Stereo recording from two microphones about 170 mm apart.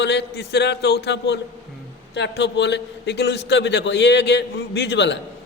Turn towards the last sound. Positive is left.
turn(degrees=90)